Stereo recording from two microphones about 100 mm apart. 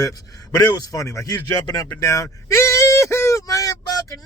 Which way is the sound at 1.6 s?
45° left (ahead or behind).